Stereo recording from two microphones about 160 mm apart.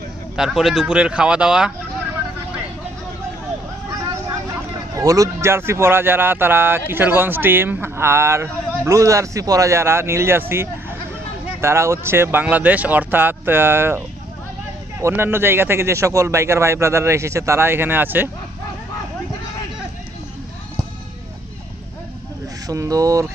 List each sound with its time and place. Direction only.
0.4 s speech: centre (ahead or behind)
4.9 s a man's voice: 20° right (ahead or behind)
11.6 s a man's voice: 15° right (ahead or behind)
22.7 s speech: 20° right (ahead or behind)